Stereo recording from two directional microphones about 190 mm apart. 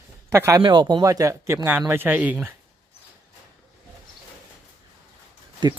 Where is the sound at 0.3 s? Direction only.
15° right (ahead or behind).